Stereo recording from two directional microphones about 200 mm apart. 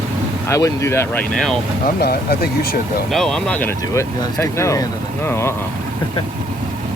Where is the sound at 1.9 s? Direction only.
50° left (ahead or behind).